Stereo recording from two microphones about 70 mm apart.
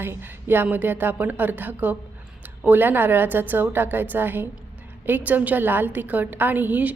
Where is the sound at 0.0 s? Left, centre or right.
Right.